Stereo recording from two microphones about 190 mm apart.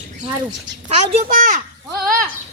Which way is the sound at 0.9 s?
40° right (ahead or behind).